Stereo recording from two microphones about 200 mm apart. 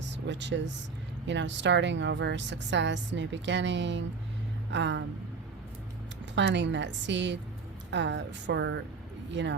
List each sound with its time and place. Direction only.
0.3 s a woman's voice: 60° right (ahead or behind)
6.3 s a woman's voice: 60° right (ahead or behind)